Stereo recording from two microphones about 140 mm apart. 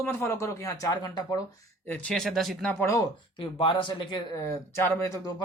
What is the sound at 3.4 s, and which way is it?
Speech, 35° left (ahead or behind).